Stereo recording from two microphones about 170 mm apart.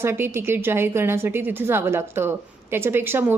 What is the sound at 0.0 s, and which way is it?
A woman's voice, 15° right (ahead or behind).